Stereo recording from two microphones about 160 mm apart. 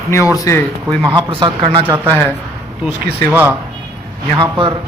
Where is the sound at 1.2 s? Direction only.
30° right (ahead or behind).